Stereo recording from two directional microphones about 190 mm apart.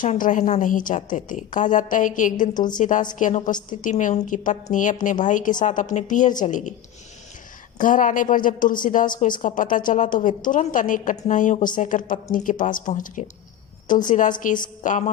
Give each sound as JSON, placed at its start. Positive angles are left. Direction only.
{"t": 0.0, "sound": "a woman's voice", "side_deg": 45}
{"t": 7.8, "sound": "a woman's voice", "side_deg": 45}